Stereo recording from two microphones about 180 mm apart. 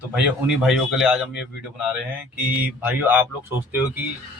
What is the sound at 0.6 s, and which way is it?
Speech, centre (ahead or behind).